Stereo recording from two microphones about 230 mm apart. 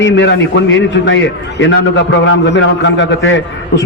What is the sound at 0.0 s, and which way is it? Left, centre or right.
A man's voice, left.